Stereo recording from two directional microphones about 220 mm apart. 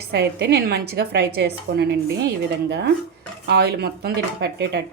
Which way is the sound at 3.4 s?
50° right (ahead or behind).